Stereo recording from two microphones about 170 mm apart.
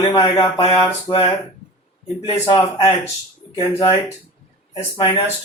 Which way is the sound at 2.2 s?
30° left (ahead or behind).